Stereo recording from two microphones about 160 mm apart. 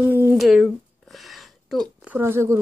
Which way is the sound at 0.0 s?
10° right (ahead or behind).